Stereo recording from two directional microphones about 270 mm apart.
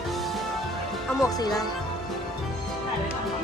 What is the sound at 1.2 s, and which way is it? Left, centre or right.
Speech, centre.